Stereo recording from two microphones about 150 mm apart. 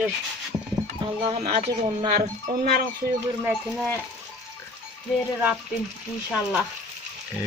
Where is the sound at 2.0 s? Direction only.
75° right (ahead or behind).